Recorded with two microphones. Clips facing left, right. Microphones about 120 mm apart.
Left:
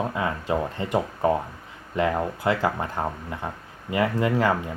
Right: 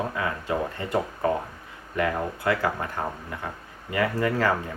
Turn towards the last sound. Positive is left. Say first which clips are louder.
# left 2 dB
turn(degrees=20)  # may be behind; listen again after turning